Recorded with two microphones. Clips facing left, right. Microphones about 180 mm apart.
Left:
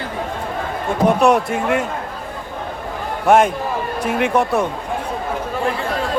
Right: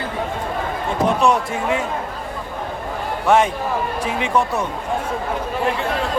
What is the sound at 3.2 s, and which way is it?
A man's voice, 50° left (ahead or behind).